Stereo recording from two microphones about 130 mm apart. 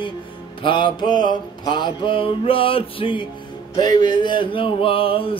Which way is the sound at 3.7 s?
30° left (ahead or behind).